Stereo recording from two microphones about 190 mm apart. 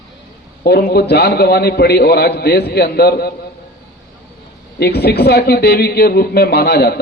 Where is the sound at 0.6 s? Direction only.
55° left (ahead or behind).